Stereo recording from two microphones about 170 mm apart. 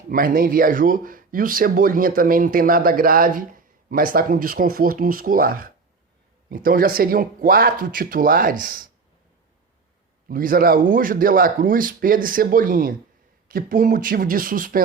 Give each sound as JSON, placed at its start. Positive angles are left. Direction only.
{"t": 0.1, "sound": "speech", "side_deg": -55}
{"t": 10.2, "sound": "speech", "side_deg": -55}